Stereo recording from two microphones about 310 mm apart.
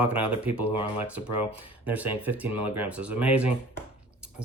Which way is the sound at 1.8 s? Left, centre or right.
Centre.